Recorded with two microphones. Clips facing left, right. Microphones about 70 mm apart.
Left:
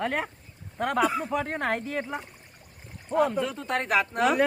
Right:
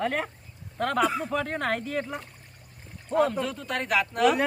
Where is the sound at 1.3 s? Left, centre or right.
Centre.